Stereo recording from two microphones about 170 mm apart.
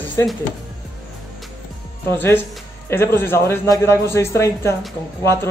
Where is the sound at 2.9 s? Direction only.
15° left (ahead or behind).